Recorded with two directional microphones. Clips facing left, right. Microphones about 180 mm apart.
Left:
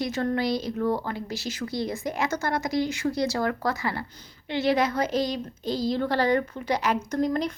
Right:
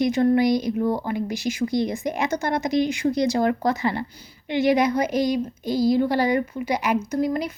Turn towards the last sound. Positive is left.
turn(degrees=-10)  # may be behind; listen again after turning